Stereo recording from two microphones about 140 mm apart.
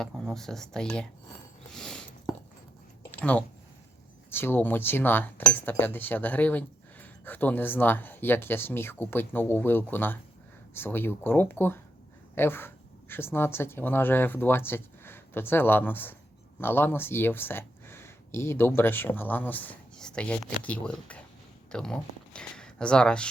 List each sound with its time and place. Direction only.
0.1 s speech: centre (ahead or behind)
1.6 s a sound: 5° left (ahead or behind)
4.3 s speech: 15° left (ahead or behind)